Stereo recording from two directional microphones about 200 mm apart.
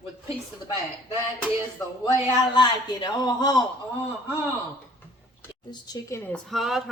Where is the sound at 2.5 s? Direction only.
20° left (ahead or behind).